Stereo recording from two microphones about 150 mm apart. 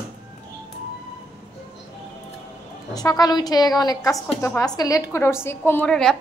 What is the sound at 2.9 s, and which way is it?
A woman's voice, 25° left (ahead or behind).